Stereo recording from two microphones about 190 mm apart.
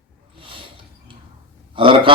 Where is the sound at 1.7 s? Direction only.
25° right (ahead or behind).